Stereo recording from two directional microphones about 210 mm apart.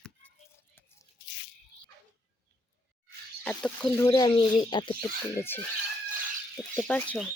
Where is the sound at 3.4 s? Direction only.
10° left (ahead or behind).